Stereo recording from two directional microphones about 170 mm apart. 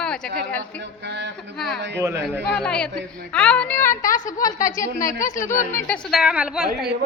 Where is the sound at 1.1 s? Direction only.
85° right.